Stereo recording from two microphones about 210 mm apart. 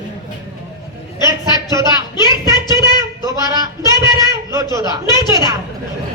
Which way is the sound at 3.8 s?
20° left (ahead or behind).